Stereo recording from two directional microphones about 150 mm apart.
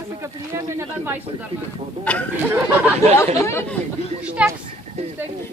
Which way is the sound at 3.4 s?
15° left (ahead or behind).